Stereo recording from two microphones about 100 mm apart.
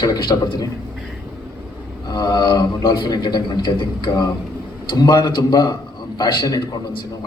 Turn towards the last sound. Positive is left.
turn(degrees=45)  # may be behind; listen again after turning